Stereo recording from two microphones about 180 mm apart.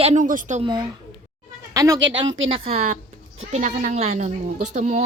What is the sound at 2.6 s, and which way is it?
Speech, 35° right (ahead or behind).